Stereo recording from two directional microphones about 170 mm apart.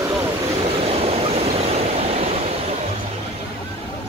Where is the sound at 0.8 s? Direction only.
35° right (ahead or behind).